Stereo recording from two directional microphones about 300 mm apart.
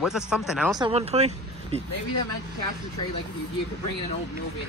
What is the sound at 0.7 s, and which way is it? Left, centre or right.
Speech, centre.